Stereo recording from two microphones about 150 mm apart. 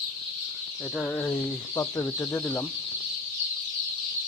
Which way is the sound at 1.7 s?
20° left (ahead or behind).